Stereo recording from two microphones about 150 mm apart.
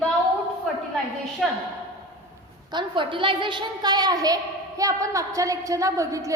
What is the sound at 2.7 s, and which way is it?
A woman's voice, 30° right (ahead or behind).